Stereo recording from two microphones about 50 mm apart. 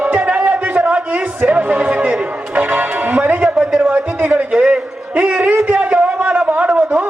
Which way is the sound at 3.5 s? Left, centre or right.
Right.